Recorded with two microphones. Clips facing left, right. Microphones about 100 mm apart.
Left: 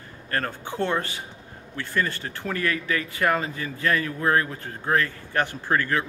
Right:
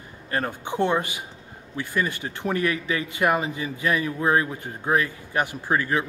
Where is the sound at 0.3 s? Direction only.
15° right (ahead or behind).